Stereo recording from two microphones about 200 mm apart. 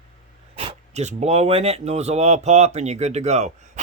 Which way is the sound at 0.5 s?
30° right (ahead or behind).